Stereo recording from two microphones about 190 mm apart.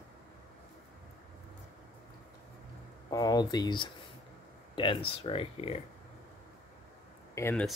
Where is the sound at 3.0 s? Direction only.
20° left (ahead or behind).